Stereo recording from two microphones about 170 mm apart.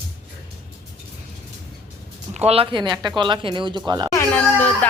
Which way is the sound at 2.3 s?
40° right (ahead or behind).